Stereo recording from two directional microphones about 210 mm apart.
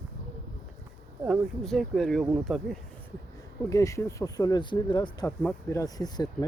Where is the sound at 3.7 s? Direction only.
15° left (ahead or behind).